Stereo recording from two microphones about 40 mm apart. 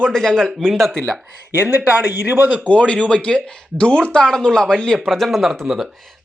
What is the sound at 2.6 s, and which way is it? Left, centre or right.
Speech, left.